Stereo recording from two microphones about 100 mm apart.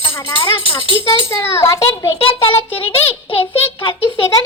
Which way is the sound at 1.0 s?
25° left (ahead or behind).